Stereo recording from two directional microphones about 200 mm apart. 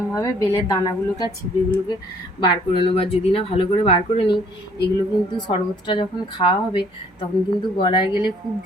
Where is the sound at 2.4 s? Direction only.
25° left (ahead or behind).